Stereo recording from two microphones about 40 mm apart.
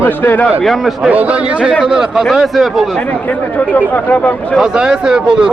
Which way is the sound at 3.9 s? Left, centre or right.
Left.